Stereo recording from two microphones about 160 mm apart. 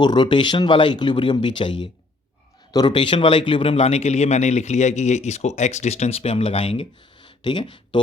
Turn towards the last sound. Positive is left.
turn(degrees=30)  # may be behind; listen again after turning